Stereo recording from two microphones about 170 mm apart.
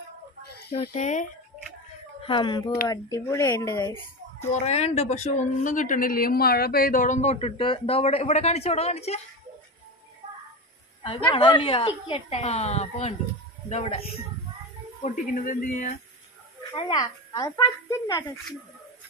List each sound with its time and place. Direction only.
0.9 s speech: 45° left (ahead or behind)
2.2 s speech: 30° left (ahead or behind)
4.4 s speech: 40° left (ahead or behind)
10.2 s music: 40° right (ahead or behind)
11.0 s speech: 30° left (ahead or behind); by 15.9 s 50° left (ahead or behind)
16.7 s speech: 25° left (ahead or behind)